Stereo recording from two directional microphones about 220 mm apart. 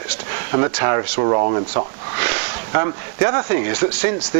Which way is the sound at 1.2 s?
30° right (ahead or behind).